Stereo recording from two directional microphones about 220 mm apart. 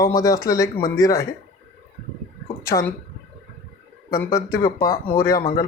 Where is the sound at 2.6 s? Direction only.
15° left (ahead or behind).